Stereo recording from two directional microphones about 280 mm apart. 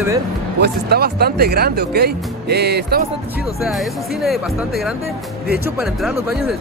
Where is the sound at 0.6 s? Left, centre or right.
Right.